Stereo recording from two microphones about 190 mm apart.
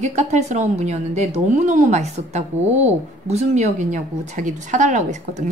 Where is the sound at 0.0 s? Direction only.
35° right (ahead or behind).